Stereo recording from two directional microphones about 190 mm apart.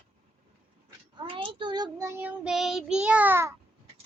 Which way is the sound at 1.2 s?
25° right (ahead or behind).